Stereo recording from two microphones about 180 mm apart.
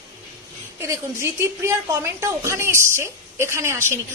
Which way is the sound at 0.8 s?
15° right (ahead or behind).